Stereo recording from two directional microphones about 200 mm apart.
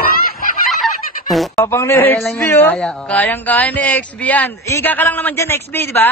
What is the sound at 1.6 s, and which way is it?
A man's voice, 15° left (ahead or behind).